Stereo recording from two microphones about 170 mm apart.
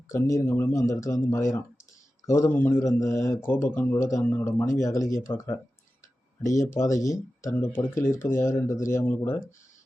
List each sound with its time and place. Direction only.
0.1 s speech: 20° left (ahead or behind)